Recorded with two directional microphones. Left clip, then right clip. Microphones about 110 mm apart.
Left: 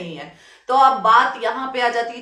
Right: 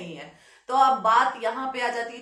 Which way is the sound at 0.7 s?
25° left (ahead or behind).